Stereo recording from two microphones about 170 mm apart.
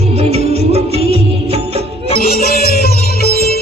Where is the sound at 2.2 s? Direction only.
60° left (ahead or behind).